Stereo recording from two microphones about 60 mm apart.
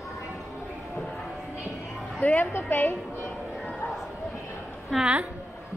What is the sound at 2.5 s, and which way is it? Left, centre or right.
Speech, left.